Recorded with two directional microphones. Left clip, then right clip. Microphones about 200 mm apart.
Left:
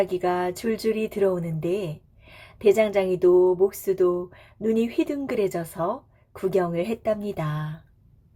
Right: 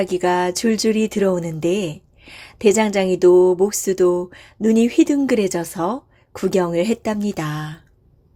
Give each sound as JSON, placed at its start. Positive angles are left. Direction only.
{"t": 0.0, "sound": "speech", "side_deg": -35}